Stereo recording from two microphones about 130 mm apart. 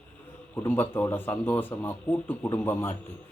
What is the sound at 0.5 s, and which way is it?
Speech, 15° left (ahead or behind).